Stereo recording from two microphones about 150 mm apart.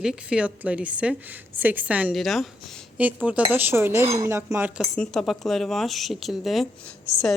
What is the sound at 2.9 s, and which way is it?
A woman's voice, 10° right (ahead or behind).